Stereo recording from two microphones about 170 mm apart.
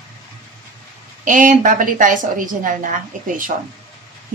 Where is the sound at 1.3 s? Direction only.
50° right (ahead or behind).